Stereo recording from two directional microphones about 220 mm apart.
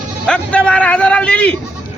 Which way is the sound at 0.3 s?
5° left (ahead or behind).